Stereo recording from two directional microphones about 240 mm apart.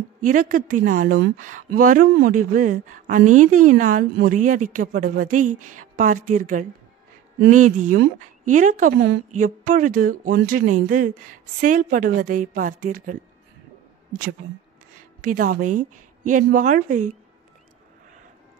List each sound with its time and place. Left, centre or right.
0.2 s speech: right
15.2 s speech: right